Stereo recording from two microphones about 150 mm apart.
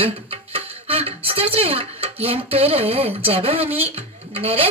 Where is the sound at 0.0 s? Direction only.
40° right (ahead or behind).